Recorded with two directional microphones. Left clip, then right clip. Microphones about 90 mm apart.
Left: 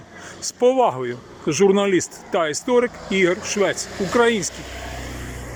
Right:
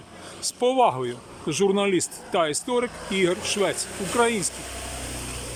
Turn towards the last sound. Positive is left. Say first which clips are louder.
# left 1 dB
turn(degrees=-5)  # may be behind; listen again after turning